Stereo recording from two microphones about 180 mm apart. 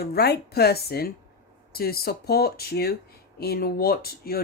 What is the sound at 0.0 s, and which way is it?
Speech, 60° left (ahead or behind).